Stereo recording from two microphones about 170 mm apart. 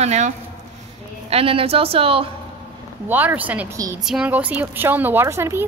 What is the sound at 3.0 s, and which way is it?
A woman's voice, 10° right (ahead or behind).